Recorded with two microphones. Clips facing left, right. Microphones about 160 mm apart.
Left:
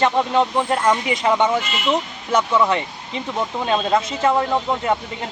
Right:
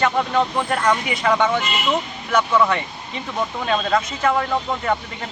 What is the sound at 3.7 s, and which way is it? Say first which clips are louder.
Speech: left 2 dB; 25° left (ahead or behind).